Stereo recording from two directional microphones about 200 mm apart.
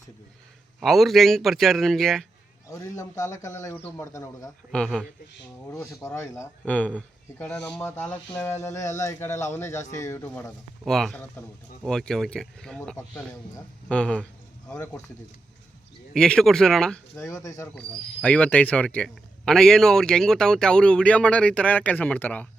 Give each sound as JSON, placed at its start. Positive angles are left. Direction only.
{"t": 0.8, "sound": "speech", "side_deg": 0}
{"t": 2.6, "sound": "speech", "side_deg": 15}
{"t": 4.7, "sound": "speech", "side_deg": 5}
{"t": 5.7, "sound": "speech", "side_deg": 15}
{"t": 10.8, "sound": "speech", "side_deg": 0}
{"t": 16.1, "sound": "speech", "side_deg": 5}
{"t": 17.2, "sound": "speech", "side_deg": 15}
{"t": 17.6, "sound": "speech", "side_deg": 5}